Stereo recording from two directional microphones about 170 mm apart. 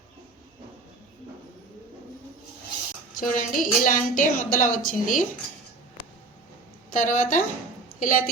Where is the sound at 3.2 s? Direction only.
50° left (ahead or behind).